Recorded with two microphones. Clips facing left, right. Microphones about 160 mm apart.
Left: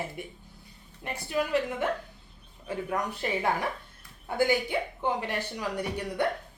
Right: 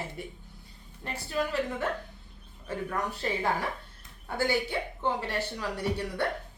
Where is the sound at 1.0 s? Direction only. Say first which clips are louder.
Left 1 dB; 15° left (ahead or behind).